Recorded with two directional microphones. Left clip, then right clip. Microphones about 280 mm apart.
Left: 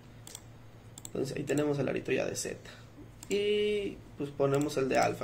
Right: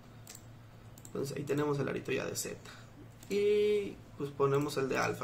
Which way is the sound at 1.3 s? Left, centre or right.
Centre.